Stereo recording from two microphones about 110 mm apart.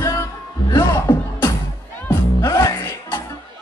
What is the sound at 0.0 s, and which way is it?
Music, 30° left (ahead or behind).